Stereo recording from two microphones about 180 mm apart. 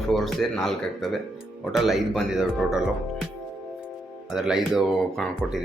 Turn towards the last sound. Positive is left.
turn(degrees=0)  # may be behind; listen again after turning